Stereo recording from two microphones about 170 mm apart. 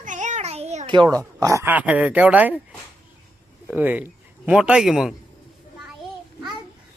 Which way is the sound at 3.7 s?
10° right (ahead or behind).